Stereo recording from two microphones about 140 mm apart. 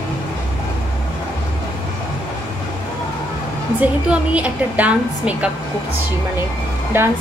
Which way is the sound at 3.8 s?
10° right (ahead or behind).